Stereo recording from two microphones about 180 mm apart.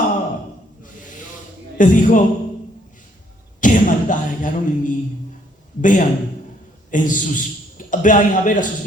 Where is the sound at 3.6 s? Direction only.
45° left (ahead or behind).